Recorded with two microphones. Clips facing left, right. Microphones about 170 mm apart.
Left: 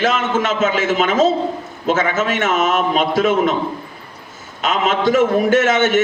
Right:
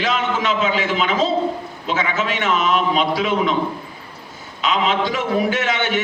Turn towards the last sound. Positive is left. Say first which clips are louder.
# left 7 dB
turn(degrees=45)  # may be behind; listen again after turning